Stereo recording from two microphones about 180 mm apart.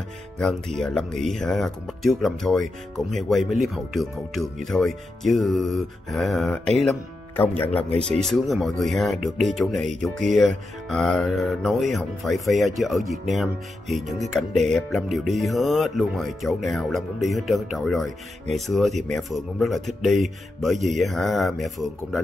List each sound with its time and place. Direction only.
0.4 s speech: 5° left (ahead or behind)
7.9 s speech: 35° right (ahead or behind)
8.3 s speech: centre (ahead or behind)